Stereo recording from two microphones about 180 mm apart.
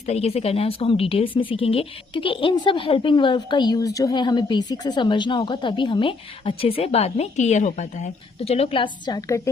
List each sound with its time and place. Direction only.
0.0 s a woman's voice: 35° left (ahead or behind); by 9.5 s 15° left (ahead or behind)